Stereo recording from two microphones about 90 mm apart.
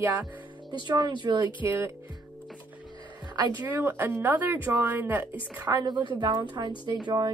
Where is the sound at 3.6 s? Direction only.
20° right (ahead or behind).